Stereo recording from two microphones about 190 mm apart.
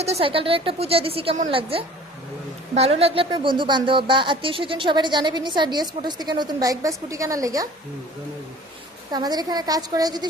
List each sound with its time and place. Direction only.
0.0 s speech: 30° right (ahead or behind)
9.1 s speech: 20° right (ahead or behind)